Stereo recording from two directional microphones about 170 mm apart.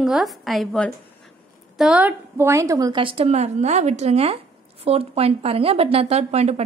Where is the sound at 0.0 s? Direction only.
Centre (ahead or behind).